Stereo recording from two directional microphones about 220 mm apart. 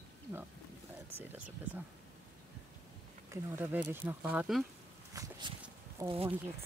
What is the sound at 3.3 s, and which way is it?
Speech, 10° right (ahead or behind).